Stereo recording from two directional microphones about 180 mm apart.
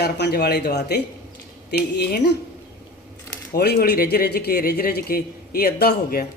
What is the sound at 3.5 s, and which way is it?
A man's voice, 60° left (ahead or behind).